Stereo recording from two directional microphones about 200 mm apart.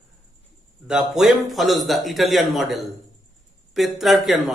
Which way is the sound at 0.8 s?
5° right (ahead or behind).